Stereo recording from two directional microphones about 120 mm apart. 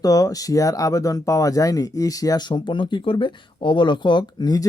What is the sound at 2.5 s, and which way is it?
Speech, 40° left (ahead or behind).